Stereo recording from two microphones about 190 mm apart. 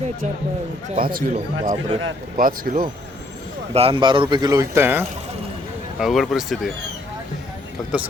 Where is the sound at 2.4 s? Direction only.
45° right (ahead or behind).